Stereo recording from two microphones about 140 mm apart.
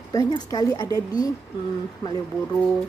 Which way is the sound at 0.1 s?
25° left (ahead or behind).